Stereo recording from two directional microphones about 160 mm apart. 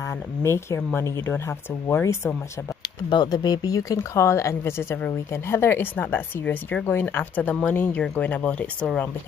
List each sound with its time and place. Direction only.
0.4 s speech: 15° left (ahead or behind)